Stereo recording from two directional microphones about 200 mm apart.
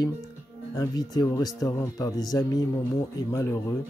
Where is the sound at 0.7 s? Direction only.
20° left (ahead or behind).